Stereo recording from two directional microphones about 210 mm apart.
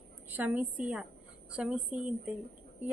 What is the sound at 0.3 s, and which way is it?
A woman's voice, 10° right (ahead or behind).